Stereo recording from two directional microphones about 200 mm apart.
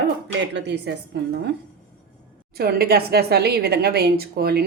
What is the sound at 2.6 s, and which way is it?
A woman's voice, 50° right (ahead or behind).